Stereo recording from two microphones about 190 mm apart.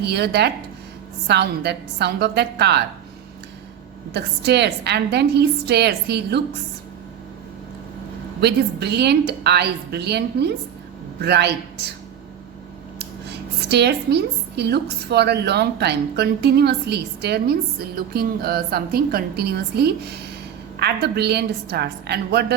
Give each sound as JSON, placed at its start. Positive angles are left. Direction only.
{"t": 0.0, "sound": "a woman's voice", "side_deg": -60}
{"t": 4.1, "sound": "a woman's voice", "side_deg": -60}
{"t": 8.4, "sound": "a woman's voice", "side_deg": -60}
{"t": 13.0, "sound": "a woman's voice", "side_deg": -60}